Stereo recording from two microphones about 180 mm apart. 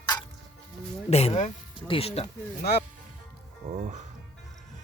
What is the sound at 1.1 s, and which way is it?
Speech, 35° left (ahead or behind).